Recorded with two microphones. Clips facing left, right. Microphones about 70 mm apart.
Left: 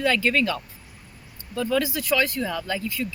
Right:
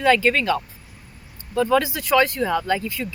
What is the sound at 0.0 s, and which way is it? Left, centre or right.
Speech, right.